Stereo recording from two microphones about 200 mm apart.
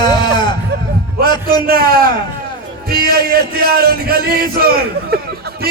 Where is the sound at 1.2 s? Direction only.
50° right (ahead or behind).